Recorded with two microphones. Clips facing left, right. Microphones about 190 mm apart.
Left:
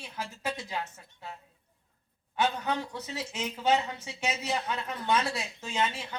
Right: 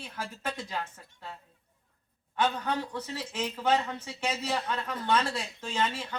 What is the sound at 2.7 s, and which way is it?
A woman's voice, 10° left (ahead or behind).